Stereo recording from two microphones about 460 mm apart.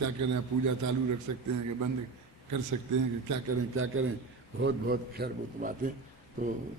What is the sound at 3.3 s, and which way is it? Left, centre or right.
A man's voice, right.